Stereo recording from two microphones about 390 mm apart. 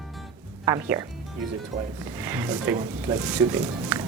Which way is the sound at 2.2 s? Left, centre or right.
Centre.